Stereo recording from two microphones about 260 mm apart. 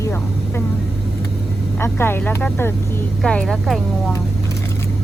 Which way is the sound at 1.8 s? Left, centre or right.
Centre.